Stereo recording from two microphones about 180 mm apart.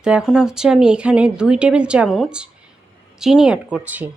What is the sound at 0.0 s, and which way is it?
Speech, 5° right (ahead or behind).